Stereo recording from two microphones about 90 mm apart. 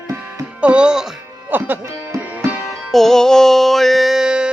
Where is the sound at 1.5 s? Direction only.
20° right (ahead or behind).